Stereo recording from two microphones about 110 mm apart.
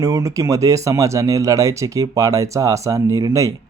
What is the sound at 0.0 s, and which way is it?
Speech, 30° right (ahead or behind).